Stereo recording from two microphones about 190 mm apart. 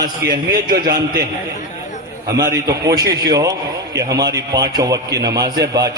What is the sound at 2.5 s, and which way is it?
A man's voice, 20° right (ahead or behind).